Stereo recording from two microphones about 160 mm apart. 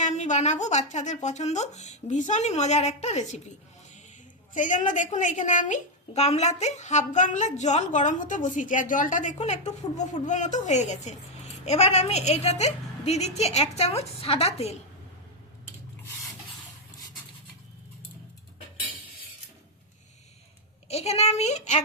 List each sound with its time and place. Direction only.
0.0 s a woman's voice: 50° left (ahead or behind)
4.5 s a woman's voice: 50° left (ahead or behind)
20.8 s a woman's voice: 40° left (ahead or behind)